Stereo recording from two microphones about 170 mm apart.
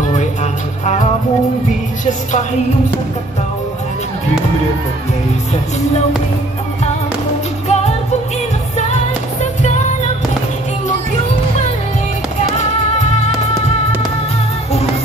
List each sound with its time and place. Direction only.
0.1 s music: 45° left (ahead or behind)
7.6 s music: 40° left (ahead or behind)
13.0 s music: 40° left (ahead or behind)